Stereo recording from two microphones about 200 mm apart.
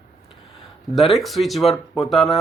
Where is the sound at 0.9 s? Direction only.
Centre (ahead or behind).